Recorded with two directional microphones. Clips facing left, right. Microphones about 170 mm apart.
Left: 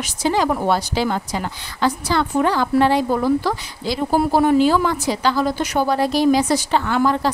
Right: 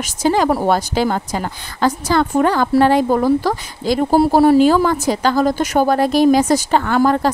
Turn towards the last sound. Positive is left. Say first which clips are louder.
# right 3 dB
turn(degrees=-50)  # may be behind; listen again after turning